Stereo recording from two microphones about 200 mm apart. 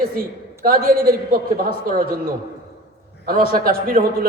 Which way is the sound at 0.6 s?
45° right (ahead or behind).